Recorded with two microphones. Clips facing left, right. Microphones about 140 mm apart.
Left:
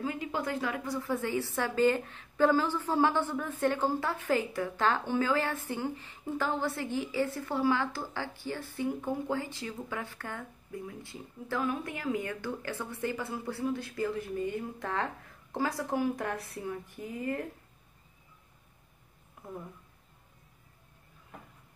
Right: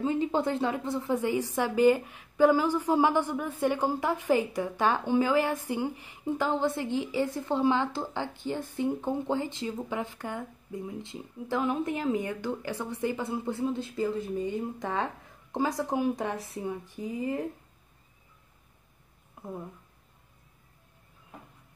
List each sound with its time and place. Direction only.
0.0 s a woman's voice: 25° right (ahead or behind)